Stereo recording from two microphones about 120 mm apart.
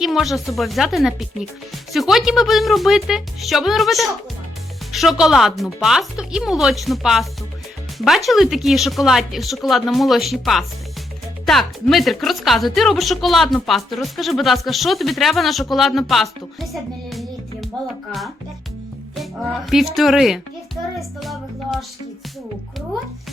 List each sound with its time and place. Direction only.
0.0 s a woman's voice: centre (ahead or behind)
19.1 s music: centre (ahead or behind)
19.7 s a woman's voice: centre (ahead or behind)